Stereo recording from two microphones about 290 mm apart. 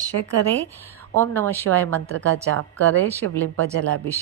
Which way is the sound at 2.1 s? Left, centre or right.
Right.